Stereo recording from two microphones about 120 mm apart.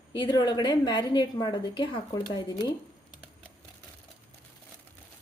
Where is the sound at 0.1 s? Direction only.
35° left (ahead or behind).